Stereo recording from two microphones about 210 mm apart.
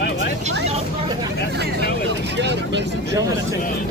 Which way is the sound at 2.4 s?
55° right (ahead or behind).